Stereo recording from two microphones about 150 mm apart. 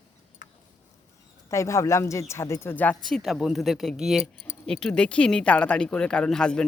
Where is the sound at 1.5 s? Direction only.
20° left (ahead or behind).